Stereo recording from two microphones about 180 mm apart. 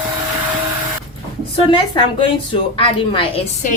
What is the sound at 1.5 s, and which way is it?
A woman's voice, 30° left (ahead or behind).